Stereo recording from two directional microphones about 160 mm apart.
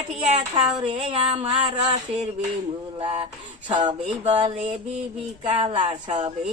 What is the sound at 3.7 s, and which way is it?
Speech, 30° right (ahead or behind).